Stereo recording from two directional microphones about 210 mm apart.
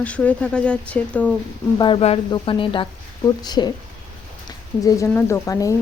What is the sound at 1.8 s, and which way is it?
Speech, 25° left (ahead or behind).